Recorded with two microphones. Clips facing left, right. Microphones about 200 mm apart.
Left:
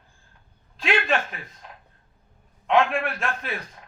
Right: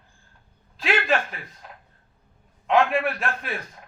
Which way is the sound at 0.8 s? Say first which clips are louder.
Even; centre (ahead or behind).